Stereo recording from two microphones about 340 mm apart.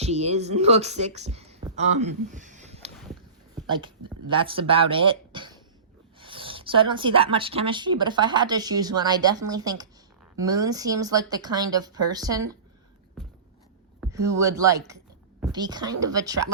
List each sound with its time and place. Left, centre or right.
0.0 s speech: centre
14.0 s speech: centre